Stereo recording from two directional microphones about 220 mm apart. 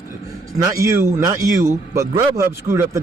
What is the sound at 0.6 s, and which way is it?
A man's voice, 15° right (ahead or behind).